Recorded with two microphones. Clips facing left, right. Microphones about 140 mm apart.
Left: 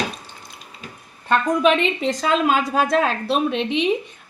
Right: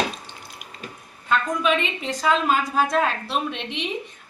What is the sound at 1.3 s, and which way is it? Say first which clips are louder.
Speech: left 5 dB; 70° left (ahead or behind).